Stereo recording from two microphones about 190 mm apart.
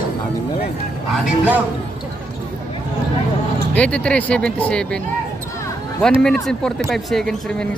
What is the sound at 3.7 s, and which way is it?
Speech, 5° left (ahead or behind).